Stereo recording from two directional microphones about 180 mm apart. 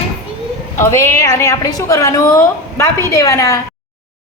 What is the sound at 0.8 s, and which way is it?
A woman's voice, 15° left (ahead or behind).